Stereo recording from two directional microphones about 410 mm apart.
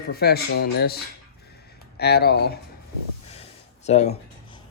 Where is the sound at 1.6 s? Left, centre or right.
Left.